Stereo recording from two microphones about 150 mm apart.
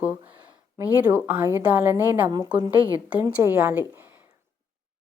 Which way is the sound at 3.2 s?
15° right (ahead or behind).